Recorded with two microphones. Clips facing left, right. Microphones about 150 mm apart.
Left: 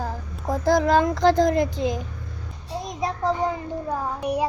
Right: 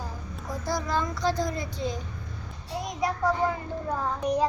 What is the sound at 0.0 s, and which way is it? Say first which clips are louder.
Child singing: left 8 dB; 60° left (ahead or behind).